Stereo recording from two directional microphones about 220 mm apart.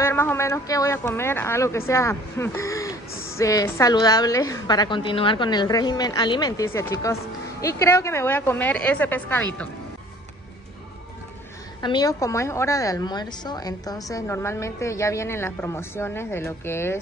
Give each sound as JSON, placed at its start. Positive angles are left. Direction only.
{"t": 0.0, "sound": "a woman's voice", "side_deg": 10}
{"t": 11.8, "sound": "a woman's voice", "side_deg": 20}